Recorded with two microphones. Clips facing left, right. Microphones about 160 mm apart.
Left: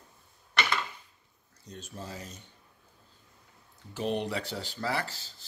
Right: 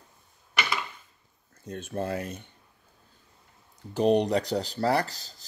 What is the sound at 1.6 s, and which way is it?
Speech, 55° right (ahead or behind).